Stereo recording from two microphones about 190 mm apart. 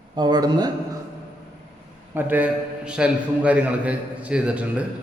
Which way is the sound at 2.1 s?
10° right (ahead or behind).